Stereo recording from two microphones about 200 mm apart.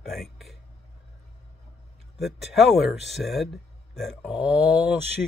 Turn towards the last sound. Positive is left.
turn(degrees=-5)  # may be behind; listen again after turning